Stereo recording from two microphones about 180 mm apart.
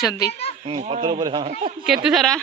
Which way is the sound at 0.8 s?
45° right (ahead or behind).